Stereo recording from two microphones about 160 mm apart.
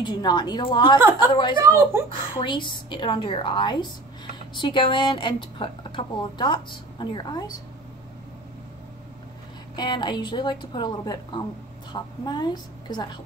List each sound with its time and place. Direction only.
0.0 s a woman's voice: 25° left (ahead or behind)
1.6 s a woman's voice: 15° right (ahead or behind)
2.3 s a woman's voice: 30° left (ahead or behind)
9.8 s a woman's voice: 30° left (ahead or behind)